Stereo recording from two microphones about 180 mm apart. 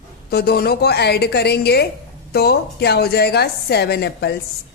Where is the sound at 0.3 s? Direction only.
60° left (ahead or behind).